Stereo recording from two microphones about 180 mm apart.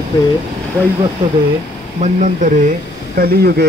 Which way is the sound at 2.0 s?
40° right (ahead or behind).